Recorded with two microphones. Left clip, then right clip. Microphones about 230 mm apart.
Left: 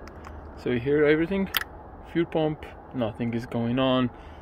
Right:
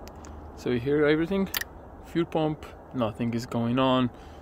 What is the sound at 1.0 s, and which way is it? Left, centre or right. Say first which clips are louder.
Speech: left 2 dB; right.